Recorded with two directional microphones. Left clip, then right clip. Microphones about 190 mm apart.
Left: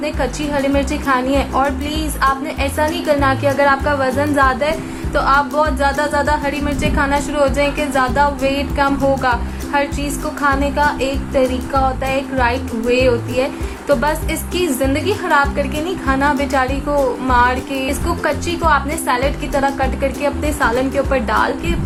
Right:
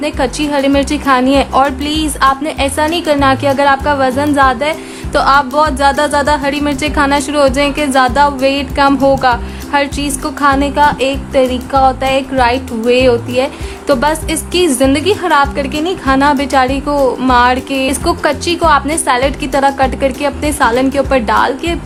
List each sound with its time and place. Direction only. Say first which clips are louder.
0.0 s music: right 5 dB; 45° right (ahead or behind)
5.1 s music: right 5 dB; 55° right (ahead or behind)